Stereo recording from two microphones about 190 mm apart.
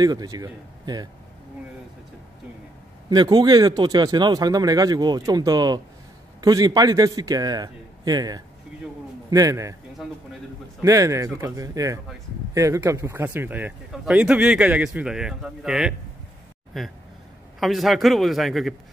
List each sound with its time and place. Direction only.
0.0 s speech: 20° right (ahead or behind)
3.1 s speech: 20° right (ahead or behind)
10.8 s a man's voice: 15° right (ahead or behind); by 18.8 s centre (ahead or behind)